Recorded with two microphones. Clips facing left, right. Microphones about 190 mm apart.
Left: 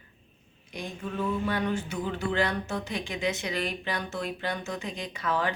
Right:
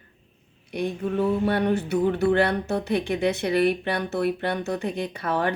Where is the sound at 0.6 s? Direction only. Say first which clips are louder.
Right 10 dB; 65° right (ahead or behind).